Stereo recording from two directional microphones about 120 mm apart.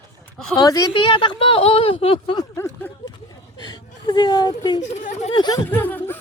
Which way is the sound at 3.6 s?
35° left (ahead or behind).